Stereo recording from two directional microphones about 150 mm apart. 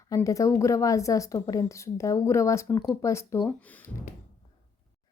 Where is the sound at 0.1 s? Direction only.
20° left (ahead or behind).